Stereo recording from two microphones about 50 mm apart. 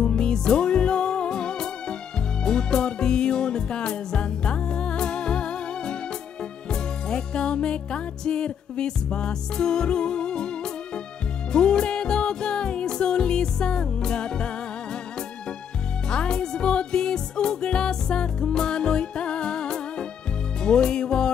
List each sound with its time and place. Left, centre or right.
0.0 s music: centre
16.1 s music: centre